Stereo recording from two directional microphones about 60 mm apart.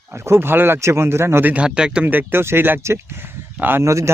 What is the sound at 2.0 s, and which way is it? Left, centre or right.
Speech, right.